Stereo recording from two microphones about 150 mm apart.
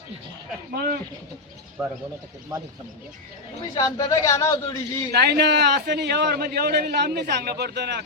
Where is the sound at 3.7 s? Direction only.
25° left (ahead or behind).